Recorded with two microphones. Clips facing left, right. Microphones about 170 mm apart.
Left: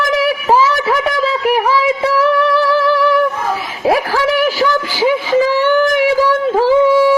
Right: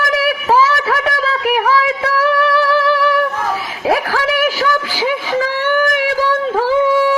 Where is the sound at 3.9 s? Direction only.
15° left (ahead or behind).